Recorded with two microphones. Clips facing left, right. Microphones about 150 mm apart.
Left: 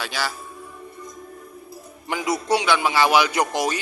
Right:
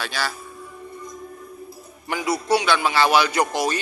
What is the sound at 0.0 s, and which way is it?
Speech, 15° left (ahead or behind).